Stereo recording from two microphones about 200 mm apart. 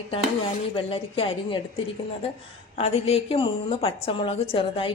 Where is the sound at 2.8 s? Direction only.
30° left (ahead or behind).